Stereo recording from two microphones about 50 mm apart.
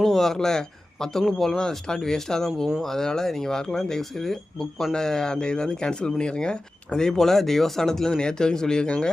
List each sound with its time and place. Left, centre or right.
0.0 s a man's voice: centre
7.1 s speech: centre